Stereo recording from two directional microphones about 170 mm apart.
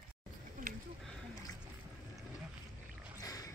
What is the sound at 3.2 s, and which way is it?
Boat, 20° left (ahead or behind).